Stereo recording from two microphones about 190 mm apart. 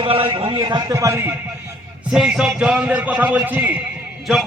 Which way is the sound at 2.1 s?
Centre (ahead or behind).